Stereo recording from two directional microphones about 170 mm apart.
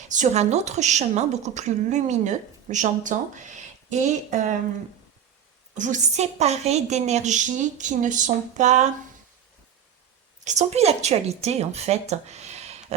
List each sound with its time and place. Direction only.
0.1 s a woman's voice: 45° right (ahead or behind)
5.7 s a woman's voice: 45° right (ahead or behind)
10.4 s a woman's voice: 45° right (ahead or behind)